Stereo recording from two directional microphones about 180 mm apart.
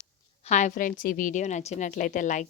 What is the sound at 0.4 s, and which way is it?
A woman's voice, 40° left (ahead or behind).